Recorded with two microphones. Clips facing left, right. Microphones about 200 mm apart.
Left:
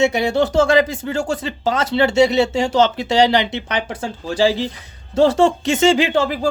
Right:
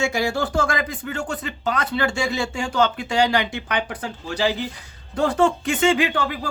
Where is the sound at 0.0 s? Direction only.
20° left (ahead or behind).